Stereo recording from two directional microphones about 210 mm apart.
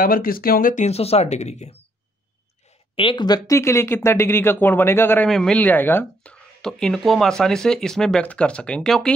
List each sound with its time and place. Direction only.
0.0 s speech: 45° left (ahead or behind)
3.0 s speech: 25° left (ahead or behind); by 9.1 s 5° left (ahead or behind)